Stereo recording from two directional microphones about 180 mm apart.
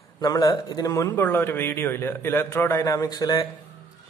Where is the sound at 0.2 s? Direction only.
20° left (ahead or behind).